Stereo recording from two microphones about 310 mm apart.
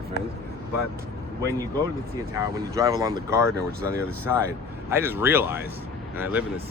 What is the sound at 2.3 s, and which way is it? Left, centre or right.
Speech, centre.